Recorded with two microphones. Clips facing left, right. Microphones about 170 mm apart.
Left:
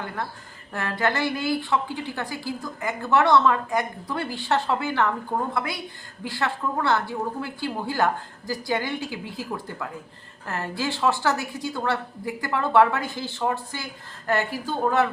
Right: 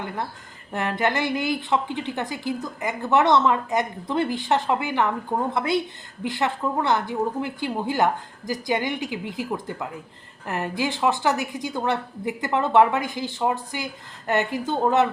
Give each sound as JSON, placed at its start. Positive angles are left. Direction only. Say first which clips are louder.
{"t": 0.7, "sound": "a woman's voice", "louder": "right 2 dB", "side_deg": -20}